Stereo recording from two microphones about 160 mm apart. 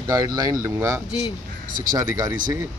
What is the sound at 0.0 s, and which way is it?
A man's voice, 20° right (ahead or behind).